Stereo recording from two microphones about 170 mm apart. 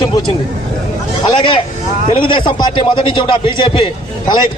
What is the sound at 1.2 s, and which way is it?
A man's voice, 25° left (ahead or behind).